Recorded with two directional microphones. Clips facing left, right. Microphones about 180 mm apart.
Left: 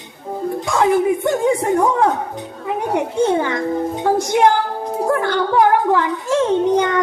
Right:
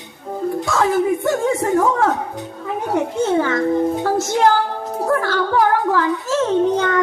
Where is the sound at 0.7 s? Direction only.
20° left (ahead or behind).